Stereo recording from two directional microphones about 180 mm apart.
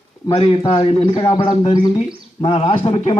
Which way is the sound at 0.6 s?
35° left (ahead or behind).